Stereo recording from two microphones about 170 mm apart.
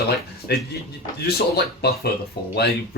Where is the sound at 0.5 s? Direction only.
70° left (ahead or behind).